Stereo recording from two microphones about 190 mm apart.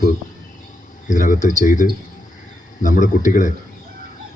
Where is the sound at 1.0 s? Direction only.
45° left (ahead or behind).